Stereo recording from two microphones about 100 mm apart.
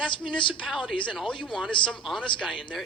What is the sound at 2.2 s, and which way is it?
Speech, 55° left (ahead or behind).